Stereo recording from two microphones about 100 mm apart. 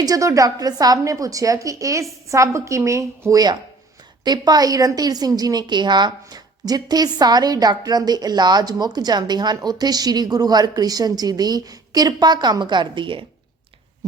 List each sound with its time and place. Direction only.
0.0 s a woman's voice: 35° right (ahead or behind); by 13.2 s 55° right (ahead or behind)